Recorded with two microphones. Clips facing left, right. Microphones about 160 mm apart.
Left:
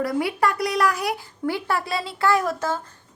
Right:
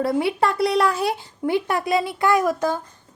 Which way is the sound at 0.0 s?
25° right (ahead or behind).